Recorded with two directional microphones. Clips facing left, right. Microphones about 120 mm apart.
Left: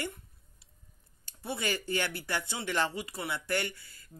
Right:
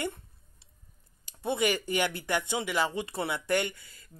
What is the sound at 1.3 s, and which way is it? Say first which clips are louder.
Speech: right 6 dB; 20° right (ahead or behind).